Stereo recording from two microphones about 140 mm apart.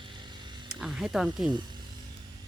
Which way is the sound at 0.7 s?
5° right (ahead or behind).